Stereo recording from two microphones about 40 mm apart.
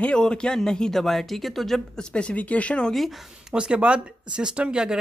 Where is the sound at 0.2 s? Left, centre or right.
Centre.